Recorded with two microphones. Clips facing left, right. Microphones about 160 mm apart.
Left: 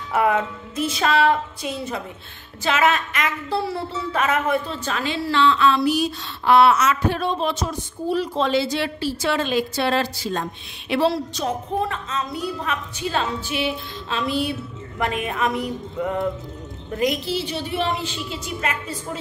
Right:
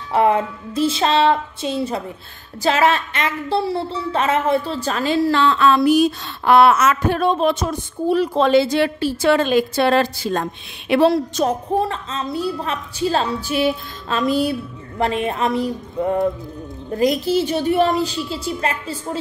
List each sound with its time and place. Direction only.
0.1 s a woman's voice: 25° right (ahead or behind); by 11.5 s 50° right (ahead or behind)
11.8 s a woman's voice: 30° right (ahead or behind)
15.0 s a woman's voice: 30° right (ahead or behind)